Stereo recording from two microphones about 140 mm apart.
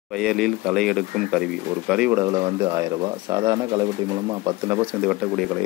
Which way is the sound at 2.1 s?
25° right (ahead or behind).